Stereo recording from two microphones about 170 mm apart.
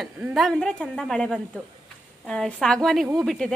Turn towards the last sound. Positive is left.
turn(degrees=0)  # may be behind; listen again after turning